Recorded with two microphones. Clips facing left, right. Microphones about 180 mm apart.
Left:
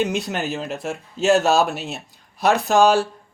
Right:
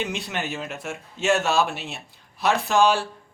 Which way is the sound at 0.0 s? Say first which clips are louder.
Left 6 dB; 40° left (ahead or behind).